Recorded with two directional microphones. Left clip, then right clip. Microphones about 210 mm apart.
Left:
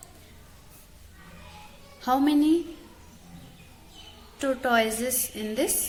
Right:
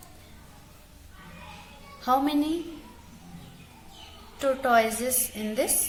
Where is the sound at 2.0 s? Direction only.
30° left (ahead or behind).